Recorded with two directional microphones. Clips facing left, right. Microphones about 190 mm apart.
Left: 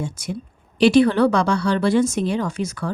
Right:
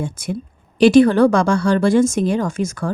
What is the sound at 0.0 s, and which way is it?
Speech, 55° right (ahead or behind).